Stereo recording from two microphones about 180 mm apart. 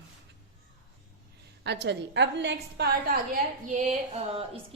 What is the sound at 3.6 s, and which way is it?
Speech, 45° right (ahead or behind).